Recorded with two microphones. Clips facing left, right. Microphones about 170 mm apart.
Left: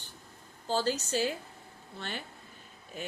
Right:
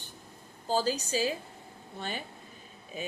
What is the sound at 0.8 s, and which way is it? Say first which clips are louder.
A woman's voice: even; 10° right (ahead or behind).